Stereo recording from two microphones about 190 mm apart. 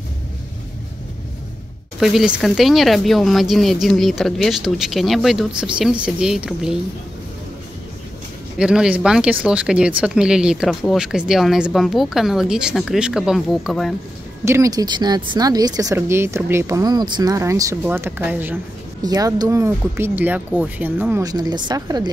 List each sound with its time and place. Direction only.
2.0 s speech: 5° right (ahead or behind)
8.5 s speech: 5° right (ahead or behind)
14.4 s speech: 15° right (ahead or behind)
19.0 s speech: 20° right (ahead or behind)
21.2 s a woman's voice: 20° right (ahead or behind)